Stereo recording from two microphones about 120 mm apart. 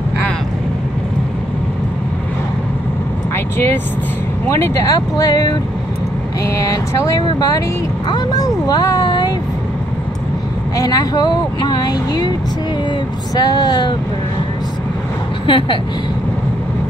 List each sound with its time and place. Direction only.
3.5 s speech: 15° left (ahead or behind); by 9.3 s 35° left (ahead or behind)
10.8 s speech: 30° left (ahead or behind)
15.4 s speech: 45° left (ahead or behind)